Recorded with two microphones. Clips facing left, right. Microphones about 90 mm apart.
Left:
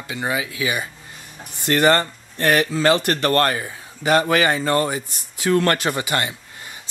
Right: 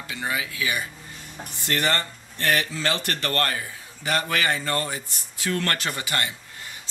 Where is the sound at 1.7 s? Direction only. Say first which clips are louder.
Left 9 dB; 45° left (ahead or behind).